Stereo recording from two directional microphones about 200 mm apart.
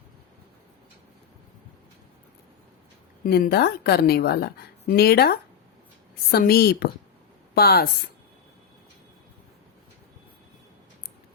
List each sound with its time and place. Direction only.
3.2 s a woman's voice: 50° left (ahead or behind)